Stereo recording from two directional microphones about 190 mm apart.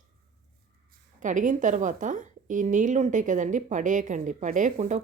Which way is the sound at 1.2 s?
40° right (ahead or behind).